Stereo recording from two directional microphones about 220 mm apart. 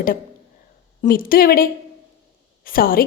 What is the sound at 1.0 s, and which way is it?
A woman's voice, 40° left (ahead or behind).